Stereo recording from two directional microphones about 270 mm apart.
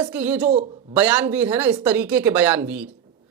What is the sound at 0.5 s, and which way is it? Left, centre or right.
Speech, right.